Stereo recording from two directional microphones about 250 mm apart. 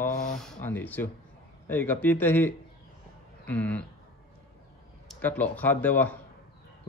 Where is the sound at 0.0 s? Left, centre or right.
Centre.